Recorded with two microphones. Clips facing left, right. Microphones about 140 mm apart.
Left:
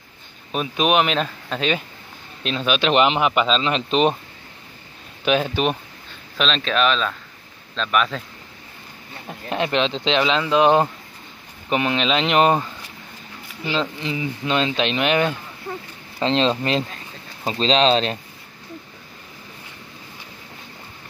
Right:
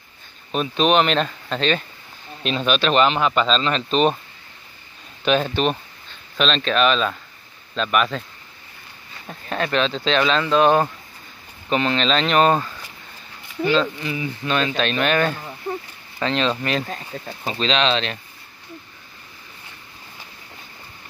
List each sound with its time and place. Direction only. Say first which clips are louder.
0.5 s speech: right 1 dB; 10° left (ahead or behind)
2.8 s speech: left 1 dB; 15° left (ahead or behind)
5.2 s speech: even; 5° left (ahead or behind)
6.3 s speech: right 1 dB; centre (ahead or behind)
9.3 s speech: left 1 dB; 20° left (ahead or behind)
16.2 s speech: left 2 dB; 25° left (ahead or behind)